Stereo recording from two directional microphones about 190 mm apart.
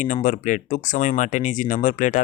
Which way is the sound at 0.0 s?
45° left (ahead or behind).